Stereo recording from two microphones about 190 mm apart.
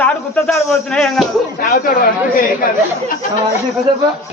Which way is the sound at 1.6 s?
50° left (ahead or behind).